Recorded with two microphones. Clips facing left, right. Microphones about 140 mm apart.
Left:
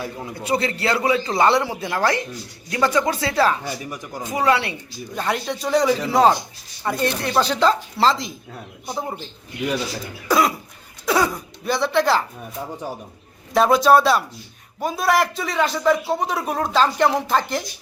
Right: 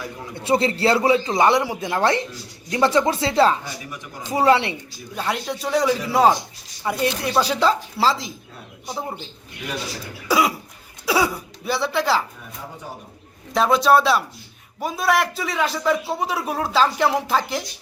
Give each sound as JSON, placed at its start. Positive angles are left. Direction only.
{"t": 0.4, "sound": "speech", "side_deg": -30}
{"t": 1.3, "sound": "speech", "side_deg": -15}
{"t": 5.1, "sound": "a man's voice", "side_deg": -5}
{"t": 10.2, "sound": "speech", "side_deg": -10}
{"t": 13.5, "sound": "a man's voice", "side_deg": 0}